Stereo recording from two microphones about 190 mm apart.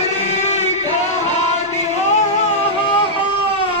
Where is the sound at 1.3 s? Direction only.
35° left (ahead or behind).